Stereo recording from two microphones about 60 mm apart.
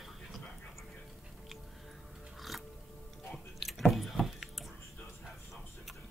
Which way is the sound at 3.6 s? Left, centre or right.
Centre.